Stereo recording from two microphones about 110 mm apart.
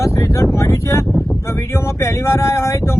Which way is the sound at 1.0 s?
Centre (ahead or behind).